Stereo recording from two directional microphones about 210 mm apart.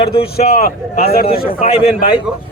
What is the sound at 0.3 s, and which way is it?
Speech, 40° left (ahead or behind).